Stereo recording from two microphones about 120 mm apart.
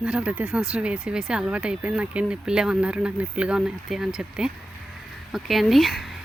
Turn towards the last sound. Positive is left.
turn(degrees=0)  # may be behind; listen again after turning